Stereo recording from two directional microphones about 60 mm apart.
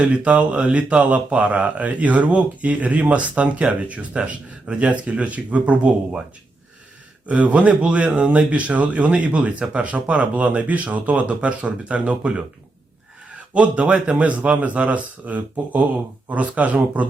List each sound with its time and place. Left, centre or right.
0.0 s speech: right
7.3 s speech: right
13.3 s speech: right